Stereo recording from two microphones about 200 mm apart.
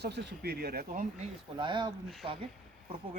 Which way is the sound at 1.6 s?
20° right (ahead or behind).